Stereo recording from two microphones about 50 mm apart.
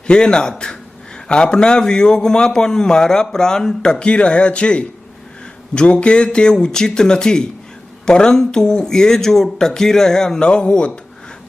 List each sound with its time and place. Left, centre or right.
0.1 s a man's voice: centre